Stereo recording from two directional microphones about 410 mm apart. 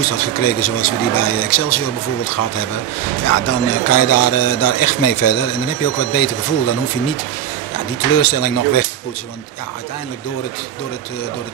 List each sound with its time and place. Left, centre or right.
0.0 s a man's voice: left